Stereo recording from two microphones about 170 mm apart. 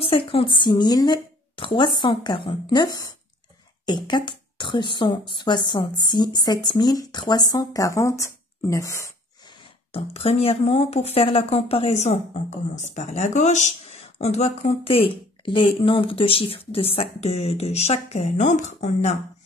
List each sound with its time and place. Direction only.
0.0 s a woman's voice: 35° left (ahead or behind)
9.9 s speech: 35° left (ahead or behind)